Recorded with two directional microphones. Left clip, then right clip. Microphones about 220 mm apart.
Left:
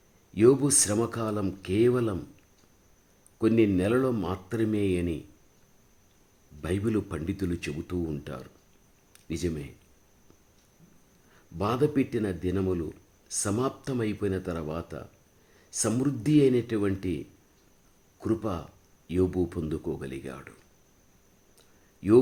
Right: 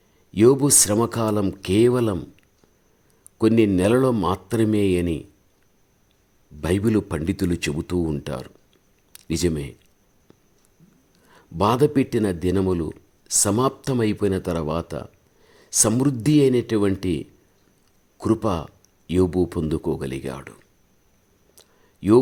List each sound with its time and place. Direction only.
0.3 s a man's voice: 35° right (ahead or behind)
3.3 s a man's voice: 40° right (ahead or behind)
6.6 s a man's voice: 35° right (ahead or behind)
11.3 s a man's voice: 40° right (ahead or behind)
21.5 s clicking: 35° right (ahead or behind)